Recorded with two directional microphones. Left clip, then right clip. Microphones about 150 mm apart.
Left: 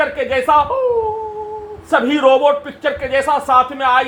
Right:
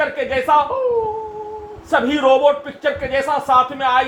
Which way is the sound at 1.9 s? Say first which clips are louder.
Left 2 dB; 20° left (ahead or behind).